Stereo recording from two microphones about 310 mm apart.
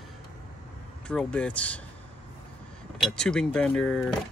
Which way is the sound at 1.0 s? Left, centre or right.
Centre.